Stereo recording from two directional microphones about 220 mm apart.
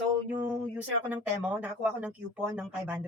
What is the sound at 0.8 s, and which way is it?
Speech, 5° right (ahead or behind).